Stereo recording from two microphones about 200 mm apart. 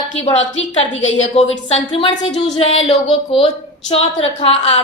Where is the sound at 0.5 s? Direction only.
70° left (ahead or behind).